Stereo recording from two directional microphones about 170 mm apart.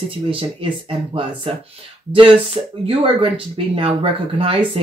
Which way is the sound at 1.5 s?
35° right (ahead or behind).